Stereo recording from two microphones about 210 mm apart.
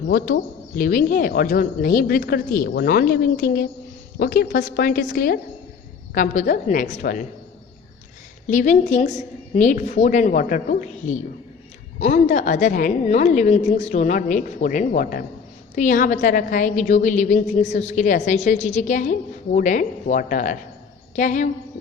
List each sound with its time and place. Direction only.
0.8 s a woman's voice: 45° left (ahead or behind)
8.4 s a woman's voice: 35° left (ahead or behind)